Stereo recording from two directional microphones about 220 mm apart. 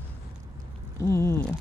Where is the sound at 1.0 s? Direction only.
10° left (ahead or behind).